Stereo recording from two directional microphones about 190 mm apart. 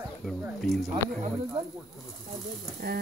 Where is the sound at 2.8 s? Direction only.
55° right (ahead or behind).